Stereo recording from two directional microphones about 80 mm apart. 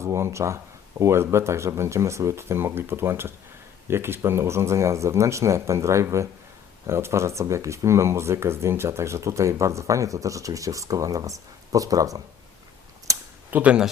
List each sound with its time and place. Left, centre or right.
0.0 s speech: right
13.1 s a sound: right
13.5 s speech: centre